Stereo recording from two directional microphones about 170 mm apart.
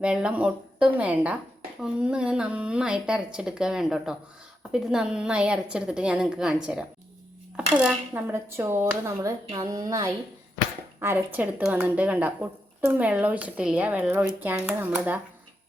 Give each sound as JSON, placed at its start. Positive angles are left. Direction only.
{"t": 0.0, "sound": "a woman's voice", "side_deg": -5}